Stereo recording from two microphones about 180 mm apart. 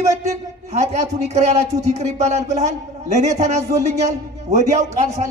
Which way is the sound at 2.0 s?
40° right (ahead or behind).